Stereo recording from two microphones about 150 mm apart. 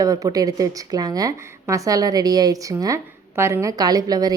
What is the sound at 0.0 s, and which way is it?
A woman's voice, 25° right (ahead or behind).